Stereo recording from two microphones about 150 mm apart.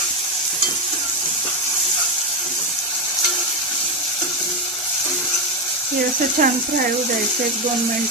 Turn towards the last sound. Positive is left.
turn(degrees=-60)  # may be behind; listen again after turning